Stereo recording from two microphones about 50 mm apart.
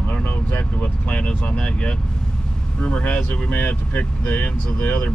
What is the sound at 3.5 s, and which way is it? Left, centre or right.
Speech, left.